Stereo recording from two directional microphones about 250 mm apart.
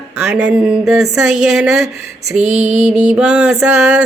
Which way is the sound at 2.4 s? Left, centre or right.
Right.